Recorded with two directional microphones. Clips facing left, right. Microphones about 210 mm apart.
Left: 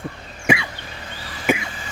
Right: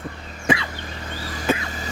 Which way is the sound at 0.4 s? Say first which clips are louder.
Left 1 dB; 10° left (ahead or behind).